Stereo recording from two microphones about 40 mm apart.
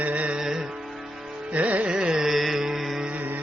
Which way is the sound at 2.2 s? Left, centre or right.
Centre.